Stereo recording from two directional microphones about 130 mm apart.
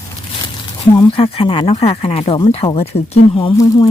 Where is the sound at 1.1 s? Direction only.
45° left (ahead or behind).